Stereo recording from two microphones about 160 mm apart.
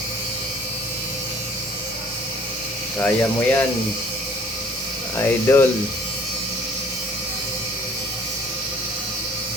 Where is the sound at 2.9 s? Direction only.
15° left (ahead or behind).